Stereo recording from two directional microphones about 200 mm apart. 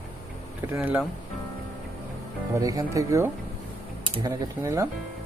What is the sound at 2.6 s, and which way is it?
Speech, 15° right (ahead or behind).